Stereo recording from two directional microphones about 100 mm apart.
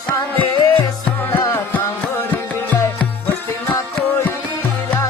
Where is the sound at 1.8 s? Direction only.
20° left (ahead or behind).